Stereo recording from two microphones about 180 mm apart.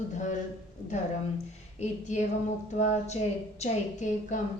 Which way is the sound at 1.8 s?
40° left (ahead or behind).